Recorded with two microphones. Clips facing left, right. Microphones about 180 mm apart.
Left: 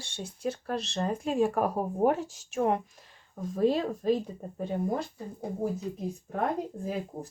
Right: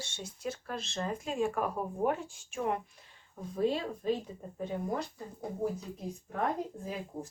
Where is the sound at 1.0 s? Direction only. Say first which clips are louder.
Left 5 dB; 40° left (ahead or behind).